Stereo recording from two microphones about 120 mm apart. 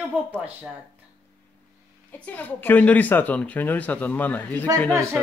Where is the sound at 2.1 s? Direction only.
15° left (ahead or behind).